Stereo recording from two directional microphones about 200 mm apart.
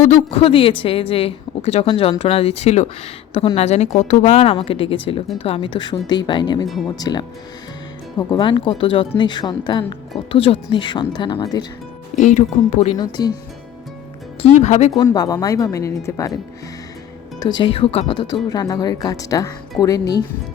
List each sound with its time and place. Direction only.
0.0 s a woman's voice: 35° left (ahead or behind)
8.3 s a woman's voice: 25° left (ahead or behind)
12.2 s a woman's voice: 35° left (ahead or behind)
13.0 s a woman's voice: 20° left (ahead or behind)
14.6 s a woman's voice: 35° left (ahead or behind)
14.9 s a woman's voice: 20° left (ahead or behind)
17.6 s a woman's voice: 30° left (ahead or behind)